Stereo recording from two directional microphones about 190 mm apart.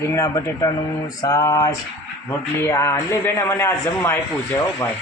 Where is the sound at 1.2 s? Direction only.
20° left (ahead or behind).